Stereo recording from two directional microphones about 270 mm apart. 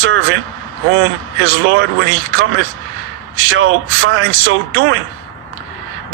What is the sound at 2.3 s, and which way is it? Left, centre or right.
A man's voice, right.